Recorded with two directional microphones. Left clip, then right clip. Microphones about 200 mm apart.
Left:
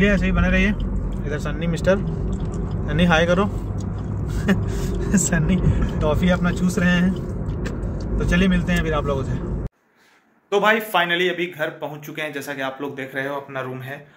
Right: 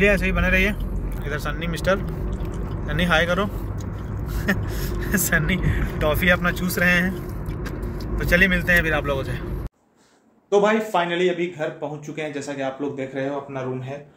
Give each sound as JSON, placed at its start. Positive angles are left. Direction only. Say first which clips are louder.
{"t": 0.0, "sound": "a man's voice", "louder": "right 1 dB", "side_deg": 0}
{"t": 1.3, "sound": "speech", "louder": "even", "side_deg": 40}
{"t": 5.3, "sound": "a man's voice", "louder": "right 2 dB", "side_deg": 5}
{"t": 8.4, "sound": "a man's voice", "louder": "right 7 dB", "side_deg": 5}
{"t": 10.5, "sound": "a man's voice", "louder": "left 1 dB", "side_deg": 0}